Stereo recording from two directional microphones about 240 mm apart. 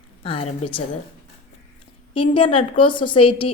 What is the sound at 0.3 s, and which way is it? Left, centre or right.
Speech, left.